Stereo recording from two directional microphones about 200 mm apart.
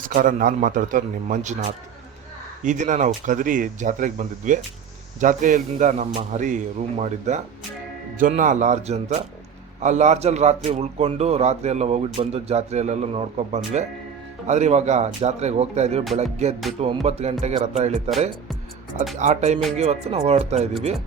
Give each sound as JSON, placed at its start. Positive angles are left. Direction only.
{"t": 0.0, "sound": "a man's voice", "side_deg": -45}
{"t": 2.6, "sound": "a man's voice", "side_deg": -40}
{"t": 19.1, "sound": "a man's voice", "side_deg": -35}